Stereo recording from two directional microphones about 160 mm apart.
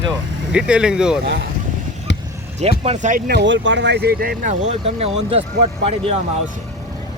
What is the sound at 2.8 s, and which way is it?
Speech, 50° right (ahead or behind).